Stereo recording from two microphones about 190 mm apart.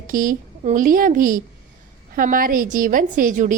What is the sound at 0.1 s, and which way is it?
A woman's voice, 45° right (ahead or behind).